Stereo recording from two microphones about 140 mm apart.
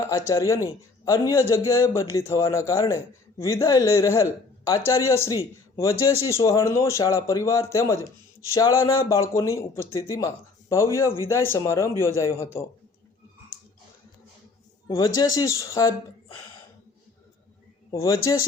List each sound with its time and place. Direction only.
0.3 s a man's voice: 20° left (ahead or behind)
14.8 s a man's voice: 25° left (ahead or behind)
17.9 s a man's voice: 20° left (ahead or behind)